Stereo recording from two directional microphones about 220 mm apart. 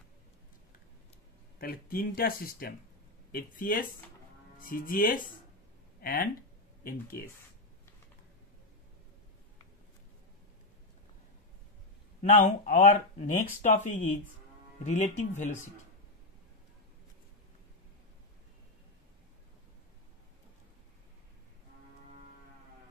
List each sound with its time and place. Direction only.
1.6 s speech: 40° left (ahead or behind)
5.9 s a sound: 45° left (ahead or behind)
6.8 s speech: 40° left (ahead or behind)
12.2 s speech: 35° left (ahead or behind)